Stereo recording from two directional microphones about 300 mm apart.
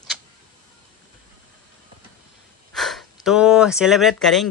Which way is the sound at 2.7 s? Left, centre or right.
Centre.